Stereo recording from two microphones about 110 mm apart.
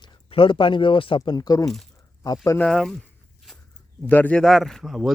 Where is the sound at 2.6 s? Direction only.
5° left (ahead or behind).